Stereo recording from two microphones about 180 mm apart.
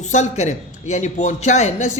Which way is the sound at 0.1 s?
40° left (ahead or behind).